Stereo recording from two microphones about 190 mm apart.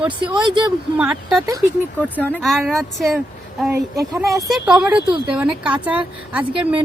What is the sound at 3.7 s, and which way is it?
Speech, 15° right (ahead or behind).